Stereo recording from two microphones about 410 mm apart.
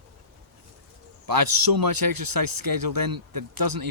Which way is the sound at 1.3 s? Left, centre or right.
Right.